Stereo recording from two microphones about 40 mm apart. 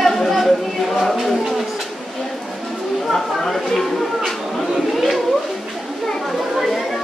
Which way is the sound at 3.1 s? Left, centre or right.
Centre.